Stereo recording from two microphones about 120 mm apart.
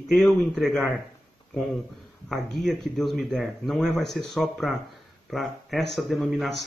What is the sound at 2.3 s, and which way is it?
Speech, centre (ahead or behind).